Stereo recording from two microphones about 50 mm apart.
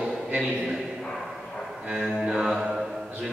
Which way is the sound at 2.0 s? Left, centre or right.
Centre.